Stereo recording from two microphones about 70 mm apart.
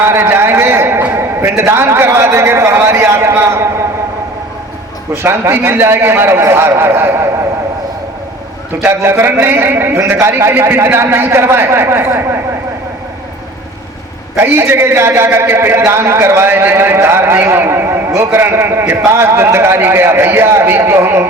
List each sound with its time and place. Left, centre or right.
0.0 s a man's voice: right
5.1 s a man's voice: right
9.0 s a man's voice: right
14.3 s a man's voice: right